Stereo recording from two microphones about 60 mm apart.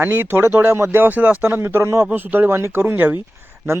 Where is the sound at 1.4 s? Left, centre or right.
Right.